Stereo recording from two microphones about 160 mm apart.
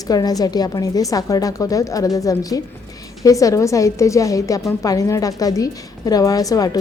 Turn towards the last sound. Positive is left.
turn(degrees=20)  # may be behind; listen again after turning